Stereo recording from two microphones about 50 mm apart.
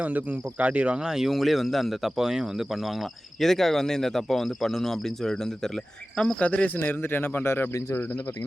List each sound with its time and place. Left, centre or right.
0.0 s speech: right
1.0 s speech: centre
2.1 s speech: centre
3.4 s speech: centre
6.4 s speech: left
6.7 s speech: left